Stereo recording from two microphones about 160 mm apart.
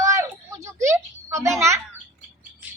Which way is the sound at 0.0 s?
20° right (ahead or behind).